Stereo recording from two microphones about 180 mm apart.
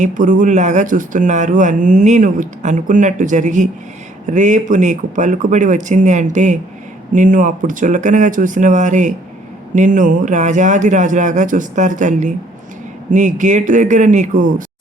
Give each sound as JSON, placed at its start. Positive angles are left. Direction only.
{"t": 0.0, "sound": "speech", "side_deg": -45}